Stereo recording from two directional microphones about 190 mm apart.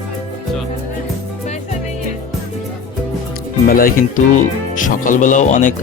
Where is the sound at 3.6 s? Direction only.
50° left (ahead or behind).